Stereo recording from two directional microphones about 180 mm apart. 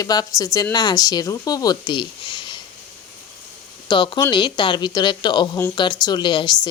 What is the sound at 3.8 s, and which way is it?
Speech, 25° left (ahead or behind).